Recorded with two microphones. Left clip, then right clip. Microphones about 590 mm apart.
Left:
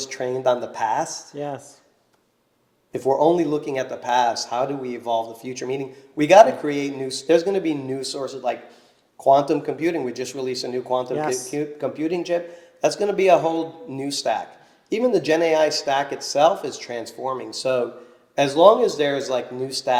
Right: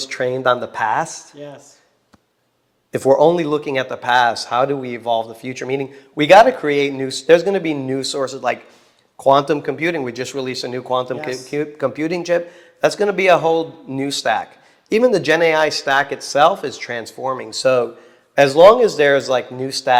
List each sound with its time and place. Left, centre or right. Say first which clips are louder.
0.0 s speech: right 4 dB; right
1.4 s speech: left 8 dB; left
2.9 s speech: right 5 dB; right